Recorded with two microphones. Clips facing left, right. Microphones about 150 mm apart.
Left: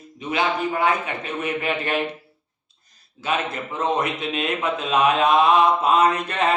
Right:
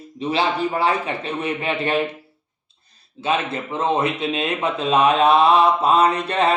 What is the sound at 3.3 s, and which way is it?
A man's voice, 30° right (ahead or behind).